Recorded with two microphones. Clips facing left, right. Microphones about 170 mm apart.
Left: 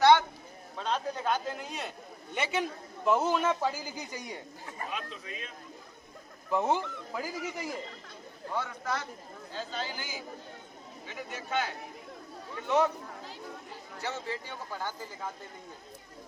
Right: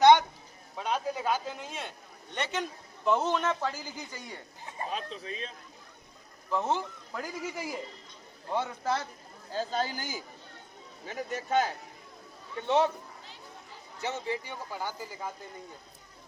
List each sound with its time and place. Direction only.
0.0 s a sound: 20° right (ahead or behind)
0.8 s a man's voice: 10° right (ahead or behind); by 4.4 s 15° left (ahead or behind)
4.9 s a man's voice: 30° right (ahead or behind)
6.5 s a man's voice: 15° left (ahead or behind); by 7.8 s centre (ahead or behind)
8.5 s a man's voice: 25° right (ahead or behind)
9.5 s a man's voice: 40° right (ahead or behind)
12.5 s a man's voice: 30° right (ahead or behind)
14.0 s speech: 15° right (ahead or behind)